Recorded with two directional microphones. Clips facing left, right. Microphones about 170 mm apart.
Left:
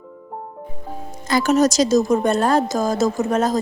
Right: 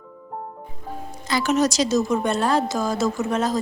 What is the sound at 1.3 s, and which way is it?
Speech, 45° left (ahead or behind).